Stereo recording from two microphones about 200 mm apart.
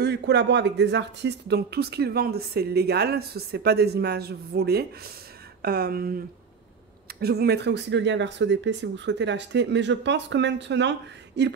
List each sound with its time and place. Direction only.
0.0 s speech: 55° right (ahead or behind)
7.2 s speech: 55° right (ahead or behind)